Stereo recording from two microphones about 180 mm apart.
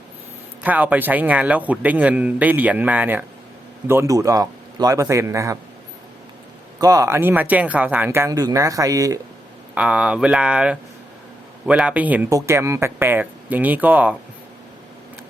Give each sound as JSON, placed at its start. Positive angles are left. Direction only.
{"t": 0.6, "sound": "a man's voice", "side_deg": -10}
{"t": 6.7, "sound": "a man's voice", "side_deg": -20}
{"t": 9.7, "sound": "a man's voice", "side_deg": -5}